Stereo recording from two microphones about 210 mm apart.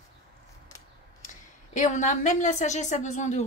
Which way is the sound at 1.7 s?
35° left (ahead or behind).